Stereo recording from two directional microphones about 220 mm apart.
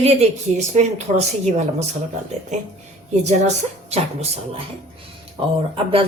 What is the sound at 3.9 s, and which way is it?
Speech, 30° right (ahead or behind).